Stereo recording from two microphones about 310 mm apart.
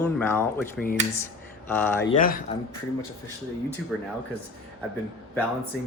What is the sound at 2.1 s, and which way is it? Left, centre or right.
Speech, left.